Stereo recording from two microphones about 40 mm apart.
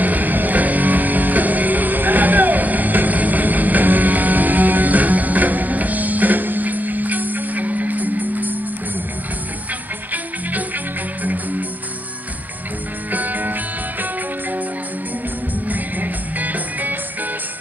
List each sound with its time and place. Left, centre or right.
0.0 s music: right
13.1 s music: right
15.7 s music: right